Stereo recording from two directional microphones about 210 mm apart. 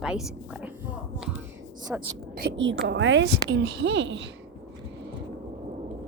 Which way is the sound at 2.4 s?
55° right (ahead or behind).